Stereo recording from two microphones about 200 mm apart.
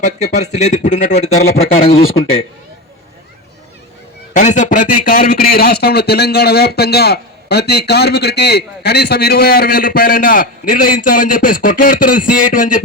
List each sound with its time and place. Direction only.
0.0 s speech: 35° left (ahead or behind)
4.4 s speech: 35° left (ahead or behind)